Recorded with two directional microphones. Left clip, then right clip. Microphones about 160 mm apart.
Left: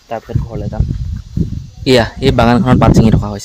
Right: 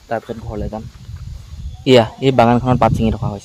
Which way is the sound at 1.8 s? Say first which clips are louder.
Left 1 dB; 10° left (ahead or behind).